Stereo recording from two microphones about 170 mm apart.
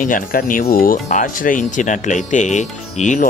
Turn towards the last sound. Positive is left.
turn(degrees=45)  # may be behind; listen again after turning